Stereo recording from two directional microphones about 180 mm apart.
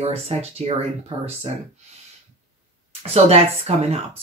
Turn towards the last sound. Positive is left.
turn(degrees=-35)  # may be behind; listen again after turning